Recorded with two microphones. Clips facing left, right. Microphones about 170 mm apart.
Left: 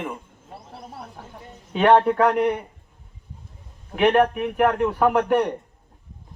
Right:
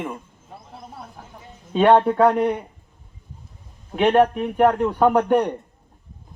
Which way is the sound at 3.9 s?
30° right (ahead or behind).